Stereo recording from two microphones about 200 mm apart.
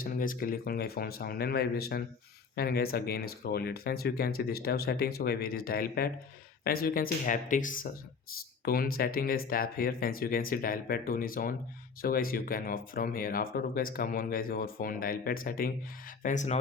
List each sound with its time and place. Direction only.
0.0 s speech: 45° left (ahead or behind)